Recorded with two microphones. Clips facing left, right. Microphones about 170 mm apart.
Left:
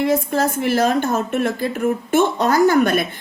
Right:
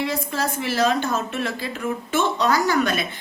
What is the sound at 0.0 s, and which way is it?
A woman's voice, 50° left (ahead or behind).